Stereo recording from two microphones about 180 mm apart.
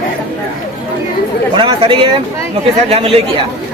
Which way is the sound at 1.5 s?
30° right (ahead or behind).